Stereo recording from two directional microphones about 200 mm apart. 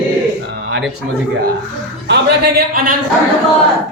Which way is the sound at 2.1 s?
55° right (ahead or behind).